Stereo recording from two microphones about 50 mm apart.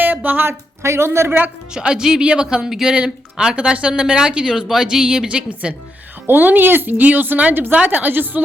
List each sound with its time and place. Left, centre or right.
0.0 s a sound: right
0.4 s speech: right
1.7 s speech: centre
6.2 s speech: right
7.5 s a woman's voice: right